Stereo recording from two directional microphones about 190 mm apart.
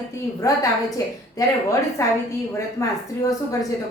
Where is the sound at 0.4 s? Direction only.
15° left (ahead or behind).